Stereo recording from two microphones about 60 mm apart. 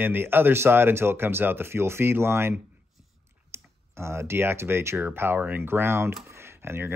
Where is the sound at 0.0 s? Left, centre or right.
Right.